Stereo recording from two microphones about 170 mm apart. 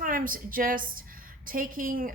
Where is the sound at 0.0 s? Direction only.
55° right (ahead or behind).